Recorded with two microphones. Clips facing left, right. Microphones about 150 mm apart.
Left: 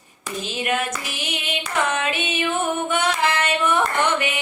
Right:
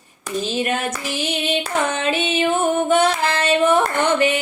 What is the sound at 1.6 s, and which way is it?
Music, 30° right (ahead or behind).